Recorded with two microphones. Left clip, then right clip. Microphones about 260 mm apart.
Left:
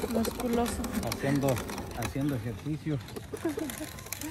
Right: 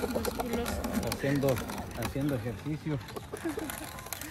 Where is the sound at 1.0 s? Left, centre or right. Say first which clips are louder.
Left 1 dB; centre.